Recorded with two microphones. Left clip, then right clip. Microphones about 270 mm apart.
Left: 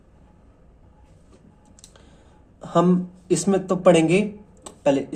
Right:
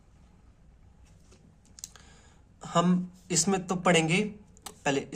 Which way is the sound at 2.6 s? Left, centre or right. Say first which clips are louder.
Left 7 dB; right.